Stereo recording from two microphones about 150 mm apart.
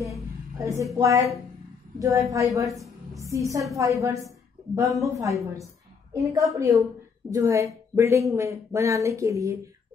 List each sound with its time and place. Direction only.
0.6 s a woman's voice: 20° right (ahead or behind)
6.3 s a woman's voice: 20° right (ahead or behind)